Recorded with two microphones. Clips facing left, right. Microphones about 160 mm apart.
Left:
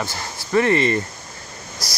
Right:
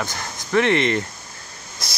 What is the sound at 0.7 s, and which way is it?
Speech, 70° right (ahead or behind).